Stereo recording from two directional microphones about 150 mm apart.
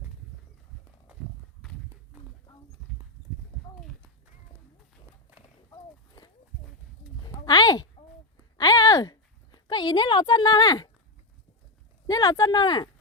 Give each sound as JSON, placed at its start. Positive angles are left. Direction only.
{"t": 5.7, "sound": "horse", "side_deg": 25}
{"t": 7.2, "sound": "a sound", "side_deg": 30}
{"t": 12.0, "sound": "speech", "side_deg": 25}